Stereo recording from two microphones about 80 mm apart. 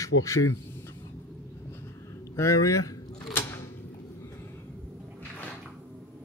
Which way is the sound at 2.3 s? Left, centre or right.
Left.